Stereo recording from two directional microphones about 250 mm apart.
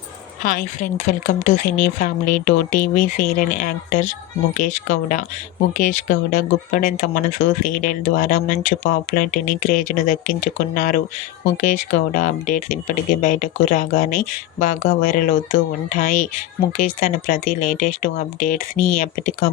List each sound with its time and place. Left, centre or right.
0.4 s speech: left